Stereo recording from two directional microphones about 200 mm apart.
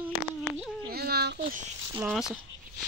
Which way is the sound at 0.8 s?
50° right (ahead or behind).